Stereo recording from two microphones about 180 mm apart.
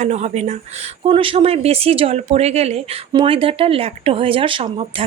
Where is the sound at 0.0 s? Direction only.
40° right (ahead or behind).